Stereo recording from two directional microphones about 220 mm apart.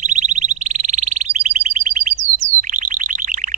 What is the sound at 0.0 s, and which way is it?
Alarm, 30° right (ahead or behind).